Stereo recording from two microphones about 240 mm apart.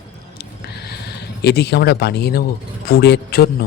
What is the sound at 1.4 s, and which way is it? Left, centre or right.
A man's voice, left.